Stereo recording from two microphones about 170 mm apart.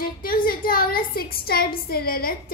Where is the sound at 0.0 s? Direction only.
60° left (ahead or behind).